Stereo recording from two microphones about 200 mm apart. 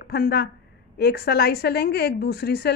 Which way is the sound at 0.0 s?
55° left (ahead or behind).